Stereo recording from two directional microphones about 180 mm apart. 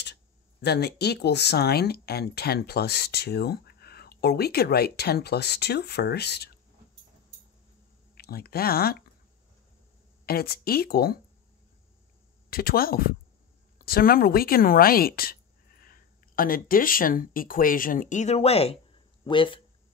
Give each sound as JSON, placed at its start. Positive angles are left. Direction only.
{"t": 0.0, "sound": "speech", "side_deg": 70}
{"t": 8.2, "sound": "speech", "side_deg": 60}
{"t": 10.2, "sound": "speech", "side_deg": 60}
{"t": 12.4, "sound": "speech", "side_deg": 55}